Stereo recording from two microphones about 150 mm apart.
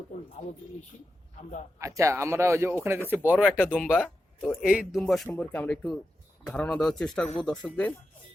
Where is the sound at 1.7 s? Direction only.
20° right (ahead or behind).